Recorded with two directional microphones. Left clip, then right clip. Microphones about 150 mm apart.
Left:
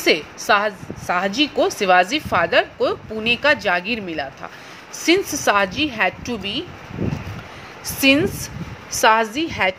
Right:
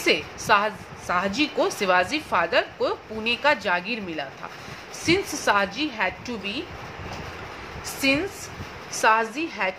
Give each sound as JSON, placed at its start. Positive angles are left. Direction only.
{"t": 0.0, "sound": "a woman's voice", "side_deg": 35}
{"t": 8.0, "sound": "a woman's voice", "side_deg": 50}